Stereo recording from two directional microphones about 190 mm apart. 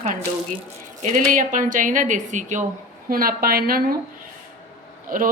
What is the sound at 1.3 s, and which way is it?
A woman's voice, 45° right (ahead or behind).